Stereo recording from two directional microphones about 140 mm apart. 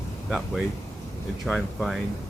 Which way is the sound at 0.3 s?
Centre (ahead or behind).